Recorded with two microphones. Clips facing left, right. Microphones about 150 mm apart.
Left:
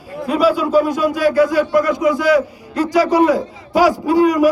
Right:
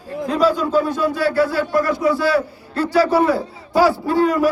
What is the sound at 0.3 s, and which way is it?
Speech, 10° left (ahead or behind).